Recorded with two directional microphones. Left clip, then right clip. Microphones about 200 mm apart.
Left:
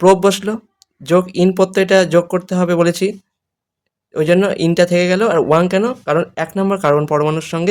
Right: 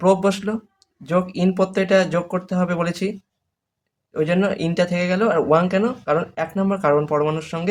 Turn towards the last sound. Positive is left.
turn(degrees=45)  # may be behind; listen again after turning